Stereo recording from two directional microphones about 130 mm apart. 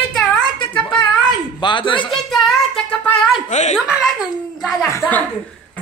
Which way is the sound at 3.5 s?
65° left (ahead or behind).